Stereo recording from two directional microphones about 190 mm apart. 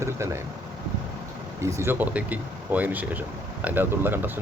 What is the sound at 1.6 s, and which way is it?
Speech, 15° right (ahead or behind).